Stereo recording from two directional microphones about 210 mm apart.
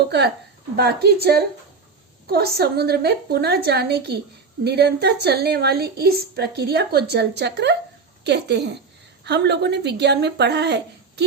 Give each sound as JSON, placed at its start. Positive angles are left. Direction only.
{"t": 0.8, "sound": "a woman's voice", "side_deg": -50}